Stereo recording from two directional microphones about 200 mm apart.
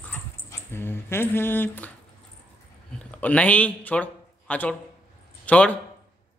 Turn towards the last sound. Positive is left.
turn(degrees=5)  # may be behind; listen again after turning